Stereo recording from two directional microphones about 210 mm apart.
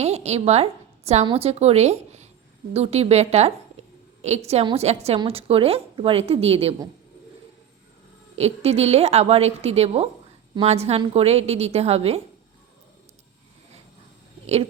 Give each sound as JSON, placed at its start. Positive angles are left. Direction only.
{"t": 0.0, "sound": "a woman's voice", "side_deg": -30}
{"t": 8.4, "sound": "a woman's voice", "side_deg": -30}
{"t": 14.4, "sound": "speech", "side_deg": -30}